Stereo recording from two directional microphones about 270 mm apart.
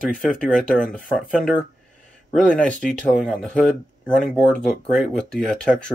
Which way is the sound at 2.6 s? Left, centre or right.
Centre.